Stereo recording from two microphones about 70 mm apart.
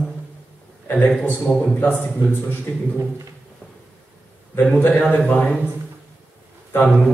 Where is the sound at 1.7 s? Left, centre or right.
Left.